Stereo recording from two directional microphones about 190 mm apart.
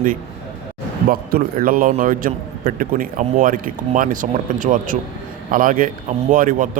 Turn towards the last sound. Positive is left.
turn(degrees=-45)  # may be behind; listen again after turning